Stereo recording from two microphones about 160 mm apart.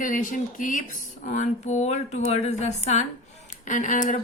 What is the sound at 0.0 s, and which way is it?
Speech, 55° left (ahead or behind).